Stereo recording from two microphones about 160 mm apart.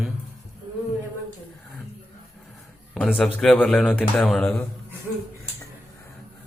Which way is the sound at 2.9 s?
5° left (ahead or behind).